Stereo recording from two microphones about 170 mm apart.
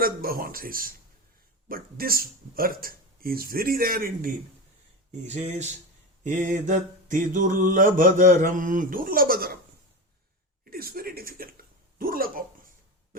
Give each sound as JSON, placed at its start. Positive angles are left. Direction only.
{"t": 0.0, "sound": "speech", "side_deg": -60}
{"t": 5.2, "sound": "mantra", "side_deg": -45}
{"t": 10.6, "sound": "a sound", "side_deg": -60}